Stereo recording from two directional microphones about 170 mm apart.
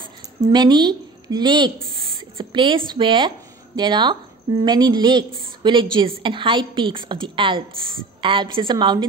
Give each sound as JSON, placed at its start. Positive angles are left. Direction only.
{"t": 0.5, "sound": "a woman's voice", "side_deg": -25}